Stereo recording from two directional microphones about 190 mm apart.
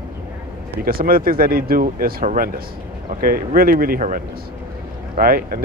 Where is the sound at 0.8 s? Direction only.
50° right (ahead or behind).